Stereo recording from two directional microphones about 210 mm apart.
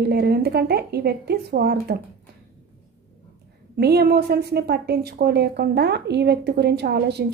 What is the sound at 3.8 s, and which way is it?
A woman's voice, 50° right (ahead or behind).